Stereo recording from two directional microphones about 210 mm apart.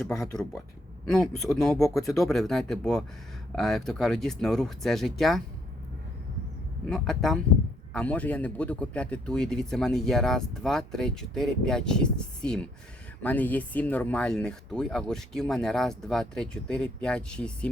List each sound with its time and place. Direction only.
0.0 s speech: centre (ahead or behind)
6.9 s speech: centre (ahead or behind)